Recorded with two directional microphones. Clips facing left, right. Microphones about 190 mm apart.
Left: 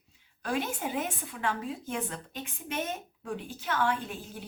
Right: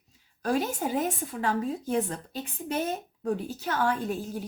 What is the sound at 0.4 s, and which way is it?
Speech, 40° right (ahead or behind).